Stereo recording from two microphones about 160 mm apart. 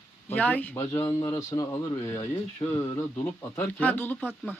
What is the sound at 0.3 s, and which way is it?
Speech, 10° left (ahead or behind).